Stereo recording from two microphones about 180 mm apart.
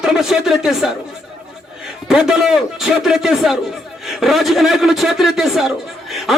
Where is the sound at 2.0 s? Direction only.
5° right (ahead or behind).